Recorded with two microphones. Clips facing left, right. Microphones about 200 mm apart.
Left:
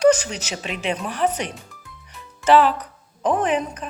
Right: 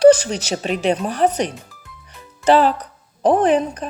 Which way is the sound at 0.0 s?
35° right (ahead or behind).